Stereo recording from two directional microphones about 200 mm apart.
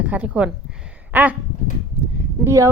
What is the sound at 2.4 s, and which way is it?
Speech, 15° right (ahead or behind).